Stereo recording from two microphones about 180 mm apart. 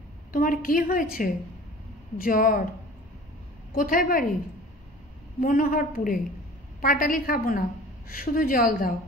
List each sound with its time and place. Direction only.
0.3 s a woman's voice: 50° left (ahead or behind)
3.7 s a woman's voice: 50° left (ahead or behind)
5.4 s a woman's voice: 50° left (ahead or behind)